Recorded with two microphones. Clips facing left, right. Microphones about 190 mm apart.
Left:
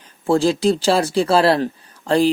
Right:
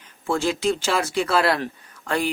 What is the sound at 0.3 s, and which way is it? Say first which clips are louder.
Speech: left 6 dB; 35° left (ahead or behind).